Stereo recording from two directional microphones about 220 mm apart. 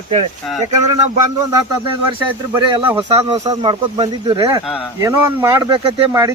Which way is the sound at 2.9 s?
20° right (ahead or behind).